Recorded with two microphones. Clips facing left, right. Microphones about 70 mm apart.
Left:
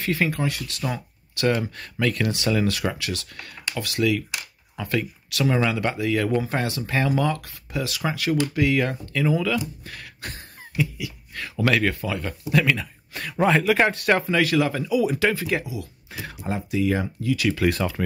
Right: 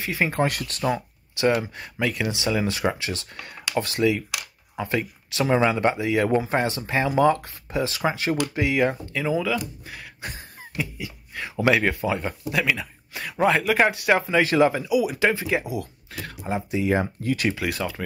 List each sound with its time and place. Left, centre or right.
0.0 s speech: centre
12.4 s speech: centre
14.4 s speech: right
14.7 s speech: centre
15.6 s speech: right
16.1 s speech: centre
16.4 s speech: centre; by 17.5 s right
17.6 s speech: centre